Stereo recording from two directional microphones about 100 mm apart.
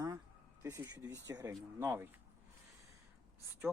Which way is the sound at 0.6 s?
25° right (ahead or behind).